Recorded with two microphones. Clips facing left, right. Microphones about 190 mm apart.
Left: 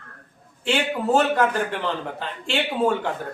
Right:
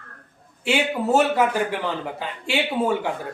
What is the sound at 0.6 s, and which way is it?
A man's voice, 10° right (ahead or behind).